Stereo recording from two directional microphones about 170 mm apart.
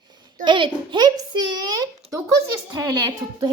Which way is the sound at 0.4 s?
30° right (ahead or behind).